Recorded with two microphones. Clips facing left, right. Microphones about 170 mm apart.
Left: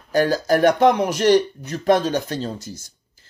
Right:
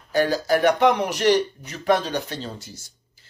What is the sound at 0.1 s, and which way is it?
Speech, 45° left (ahead or behind).